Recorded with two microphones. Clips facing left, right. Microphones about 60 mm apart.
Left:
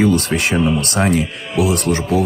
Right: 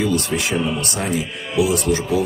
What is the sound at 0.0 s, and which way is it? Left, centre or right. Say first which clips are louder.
Speech: left 5 dB; left.